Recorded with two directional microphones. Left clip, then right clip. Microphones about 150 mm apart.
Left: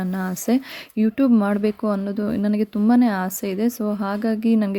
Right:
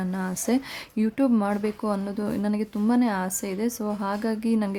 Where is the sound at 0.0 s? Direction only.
25° left (ahead or behind).